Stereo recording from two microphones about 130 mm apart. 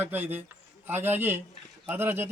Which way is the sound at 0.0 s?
15° right (ahead or behind).